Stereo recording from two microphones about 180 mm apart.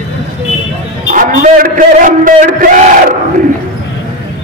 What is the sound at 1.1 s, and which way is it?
A man's voice, 45° right (ahead or behind).